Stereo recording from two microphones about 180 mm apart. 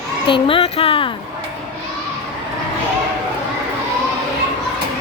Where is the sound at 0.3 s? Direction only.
30° left (ahead or behind).